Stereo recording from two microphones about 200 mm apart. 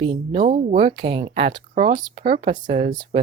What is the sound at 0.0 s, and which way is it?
Speech, 25° right (ahead or behind).